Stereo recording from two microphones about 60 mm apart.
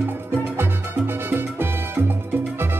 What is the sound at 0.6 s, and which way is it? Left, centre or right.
Music, right.